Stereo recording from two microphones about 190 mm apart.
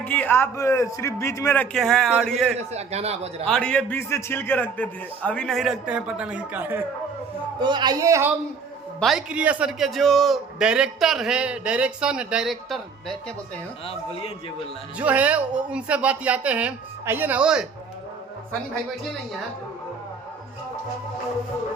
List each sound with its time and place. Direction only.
0.0 s a man's voice: 10° left (ahead or behind)
1.7 s a man's voice: centre (ahead or behind)
2.7 s speech: 35° right (ahead or behind)
3.4 s a man's voice: 5° left (ahead or behind)
7.6 s speech: 25° right (ahead or behind)
9.0 s a man's voice: centre (ahead or behind)
13.8 s speech: 30° left (ahead or behind)
14.9 s speech: 10° right (ahead or behind)